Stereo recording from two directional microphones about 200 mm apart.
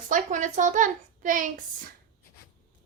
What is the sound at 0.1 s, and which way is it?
A child's voice, 40° right (ahead or behind).